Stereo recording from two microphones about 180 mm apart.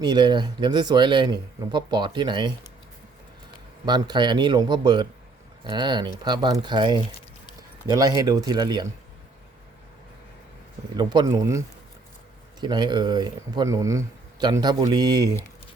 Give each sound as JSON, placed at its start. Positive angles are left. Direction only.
{"t": 0.0, "sound": "speech", "side_deg": -25}
{"t": 3.8, "sound": "speech", "side_deg": -25}
{"t": 10.9, "sound": "speech", "side_deg": -25}